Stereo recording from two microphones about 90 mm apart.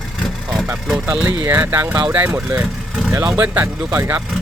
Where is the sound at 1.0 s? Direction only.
25° right (ahead or behind).